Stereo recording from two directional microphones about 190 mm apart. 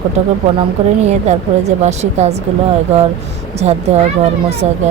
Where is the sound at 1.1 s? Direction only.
35° right (ahead or behind).